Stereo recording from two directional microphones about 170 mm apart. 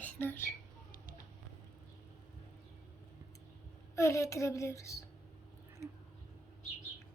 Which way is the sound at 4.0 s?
15° left (ahead or behind).